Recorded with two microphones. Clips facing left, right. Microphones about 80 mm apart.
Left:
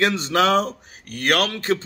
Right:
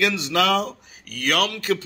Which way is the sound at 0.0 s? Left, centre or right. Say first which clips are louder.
Left 2 dB; left.